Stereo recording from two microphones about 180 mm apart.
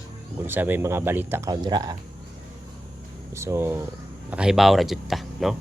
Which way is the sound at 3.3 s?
15° right (ahead or behind).